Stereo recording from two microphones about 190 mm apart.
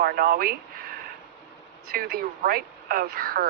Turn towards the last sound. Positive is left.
turn(degrees=-50)  # may be behind; listen again after turning